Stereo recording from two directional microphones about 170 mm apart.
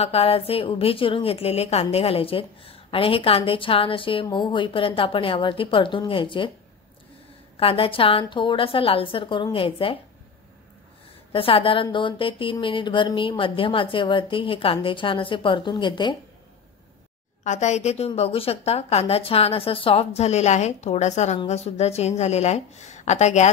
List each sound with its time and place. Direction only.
0.0 s a woman's voice: 35° left (ahead or behind)
7.5 s a woman's voice: 35° left (ahead or behind)
11.3 s a woman's voice: 30° left (ahead or behind)
17.4 s a woman's voice: 45° left (ahead or behind)